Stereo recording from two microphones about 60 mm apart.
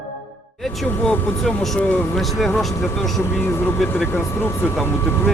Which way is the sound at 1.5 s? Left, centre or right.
Centre.